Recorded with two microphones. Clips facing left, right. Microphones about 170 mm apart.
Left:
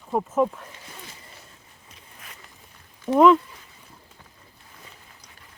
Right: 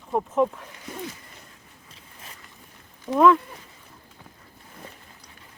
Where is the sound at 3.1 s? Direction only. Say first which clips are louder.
Left 2 dB; 20° left (ahead or behind).